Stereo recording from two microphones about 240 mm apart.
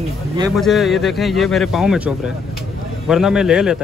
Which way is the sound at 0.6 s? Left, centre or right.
Centre.